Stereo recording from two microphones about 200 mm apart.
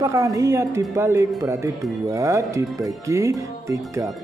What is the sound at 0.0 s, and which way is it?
Speech, 15° right (ahead or behind).